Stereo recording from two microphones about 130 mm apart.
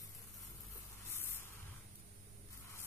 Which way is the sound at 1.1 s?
15° left (ahead or behind).